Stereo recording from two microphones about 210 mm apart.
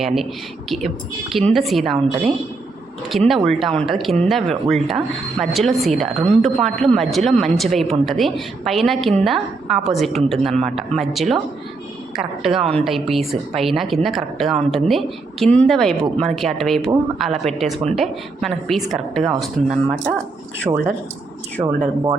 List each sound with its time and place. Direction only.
0.0 s a woman's voice: centre (ahead or behind)
12.5 s a woman's voice: 25° right (ahead or behind)
12.7 s a woman's voice: centre (ahead or behind)